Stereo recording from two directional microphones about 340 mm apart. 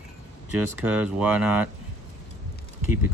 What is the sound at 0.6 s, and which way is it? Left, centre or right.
Speech, centre.